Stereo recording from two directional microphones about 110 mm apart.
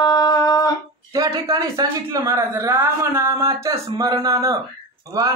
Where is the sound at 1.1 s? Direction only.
30° right (ahead or behind).